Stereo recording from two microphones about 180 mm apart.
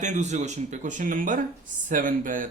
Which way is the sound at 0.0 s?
40° right (ahead or behind).